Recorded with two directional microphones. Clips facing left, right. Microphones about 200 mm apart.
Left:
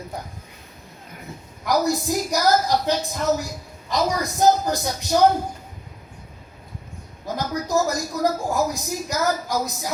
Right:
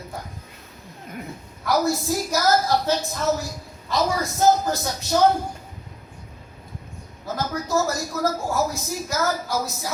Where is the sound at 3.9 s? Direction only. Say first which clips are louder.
Even; 15° left (ahead or behind).